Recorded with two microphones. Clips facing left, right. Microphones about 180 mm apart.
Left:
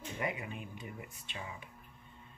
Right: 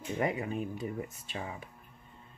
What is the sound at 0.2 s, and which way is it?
Speech, 40° right (ahead or behind).